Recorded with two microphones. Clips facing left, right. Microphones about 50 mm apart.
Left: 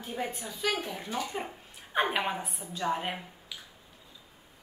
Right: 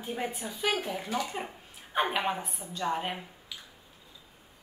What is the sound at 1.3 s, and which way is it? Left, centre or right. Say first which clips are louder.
A woman's voice: left 1 dB; centre.